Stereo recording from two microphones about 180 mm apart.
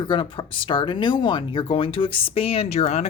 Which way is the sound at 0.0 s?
25° left (ahead or behind).